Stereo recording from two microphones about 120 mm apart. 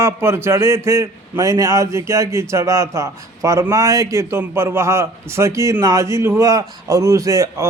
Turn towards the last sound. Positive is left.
turn(degrees=-25)  # may be behind; listen again after turning